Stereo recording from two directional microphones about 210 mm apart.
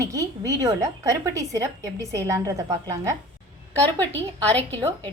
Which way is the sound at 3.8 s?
10° left (ahead or behind).